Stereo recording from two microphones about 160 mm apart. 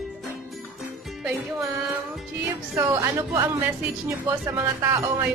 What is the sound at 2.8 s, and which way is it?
Speech, 15° right (ahead or behind).